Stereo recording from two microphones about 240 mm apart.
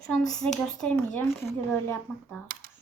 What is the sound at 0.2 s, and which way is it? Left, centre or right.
Speech, centre.